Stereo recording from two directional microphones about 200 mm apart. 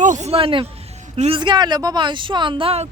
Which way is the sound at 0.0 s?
35° right (ahead or behind).